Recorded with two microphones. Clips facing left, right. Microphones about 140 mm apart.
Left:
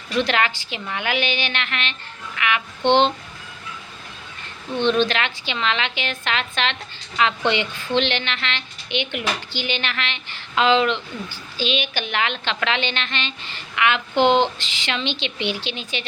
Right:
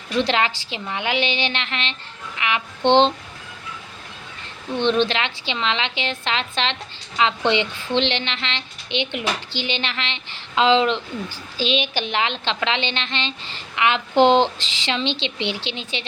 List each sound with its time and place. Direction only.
0.2 s a woman's voice: 30° right (ahead or behind)
4.8 s a woman's voice: 25° right (ahead or behind)